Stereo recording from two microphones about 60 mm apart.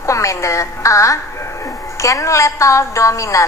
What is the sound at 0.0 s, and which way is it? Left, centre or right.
A woman's voice, left.